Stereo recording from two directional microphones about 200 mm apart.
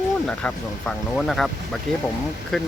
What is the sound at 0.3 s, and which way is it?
Speech, 5° left (ahead or behind).